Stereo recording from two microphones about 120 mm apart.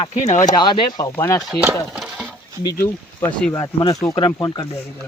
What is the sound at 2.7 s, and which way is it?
Speech, 20° left (ahead or behind).